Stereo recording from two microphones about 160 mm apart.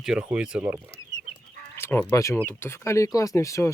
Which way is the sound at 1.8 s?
15° left (ahead or behind).